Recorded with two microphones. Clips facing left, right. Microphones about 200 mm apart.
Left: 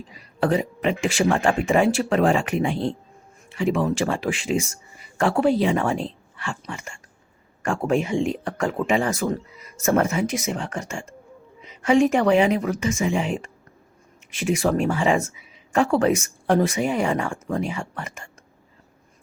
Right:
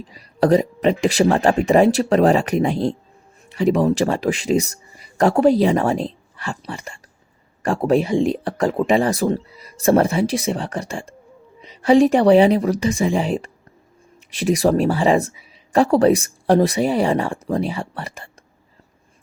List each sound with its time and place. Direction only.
0.1 s speech: 35° right (ahead or behind)